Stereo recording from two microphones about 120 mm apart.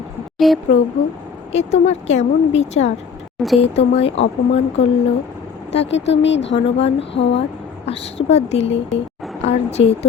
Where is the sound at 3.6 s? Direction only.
55° left (ahead or behind).